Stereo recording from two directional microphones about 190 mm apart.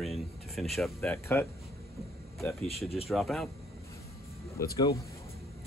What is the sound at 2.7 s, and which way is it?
Speech, 30° left (ahead or behind).